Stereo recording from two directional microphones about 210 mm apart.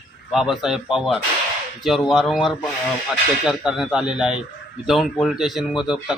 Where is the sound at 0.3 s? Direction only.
Centre (ahead or behind).